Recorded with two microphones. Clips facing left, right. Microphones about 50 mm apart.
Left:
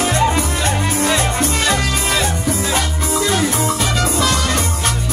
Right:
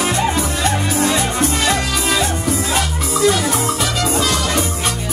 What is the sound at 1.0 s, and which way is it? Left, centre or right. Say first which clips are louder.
Music: right 1 dB; left.